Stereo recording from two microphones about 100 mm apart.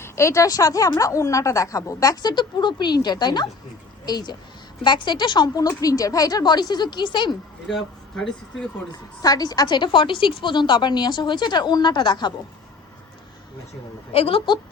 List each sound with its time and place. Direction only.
0.0 s a woman's voice: 30° left (ahead or behind); by 7.3 s 50° left (ahead or behind)
7.7 s speech: 5° left (ahead or behind)
8.9 s a woman's voice: 40° left (ahead or behind)
14.1 s a woman's voice: 75° left (ahead or behind)